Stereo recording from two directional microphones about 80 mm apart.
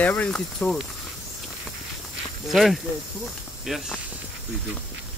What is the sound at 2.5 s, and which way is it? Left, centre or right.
Speech, centre.